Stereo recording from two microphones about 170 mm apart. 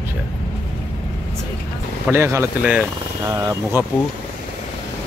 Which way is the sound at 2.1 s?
15° right (ahead or behind).